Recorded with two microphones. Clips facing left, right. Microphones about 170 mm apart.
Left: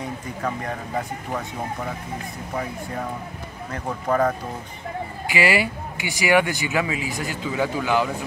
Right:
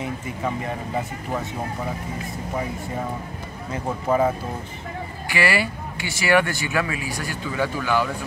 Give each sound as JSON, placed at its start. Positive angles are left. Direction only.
{"t": 3.7, "sound": "speech", "side_deg": -10}
{"t": 5.2, "sound": "speech", "side_deg": 15}